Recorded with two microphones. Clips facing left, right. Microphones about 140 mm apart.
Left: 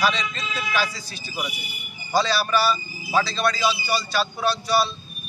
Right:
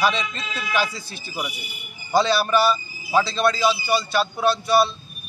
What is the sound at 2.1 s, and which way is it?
A man's voice, 20° right (ahead or behind).